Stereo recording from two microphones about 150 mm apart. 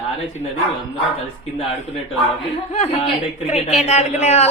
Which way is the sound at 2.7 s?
45° left (ahead or behind).